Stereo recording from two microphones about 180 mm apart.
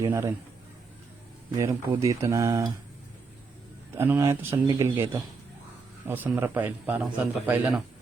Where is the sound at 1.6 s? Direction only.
15° right (ahead or behind).